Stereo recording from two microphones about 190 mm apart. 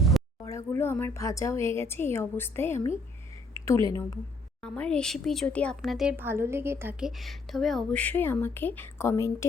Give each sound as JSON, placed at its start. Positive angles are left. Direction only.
{"t": 0.4, "sound": "a woman's voice", "side_deg": 15}
{"t": 4.6, "sound": "speech", "side_deg": 5}
{"t": 7.2, "sound": "speech", "side_deg": 0}